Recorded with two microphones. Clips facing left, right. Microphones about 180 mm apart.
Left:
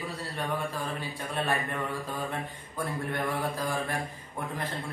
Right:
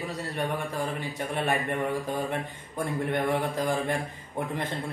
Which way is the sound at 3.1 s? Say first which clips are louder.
Right 5 dB; 20° right (ahead or behind).